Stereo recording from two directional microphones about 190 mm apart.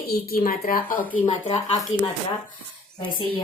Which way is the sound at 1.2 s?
30° left (ahead or behind).